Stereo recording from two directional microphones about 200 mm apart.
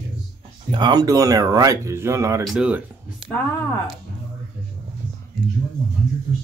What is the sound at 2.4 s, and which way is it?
Speech, 5° right (ahead or behind).